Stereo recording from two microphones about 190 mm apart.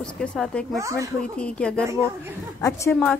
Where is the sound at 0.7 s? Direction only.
15° right (ahead or behind).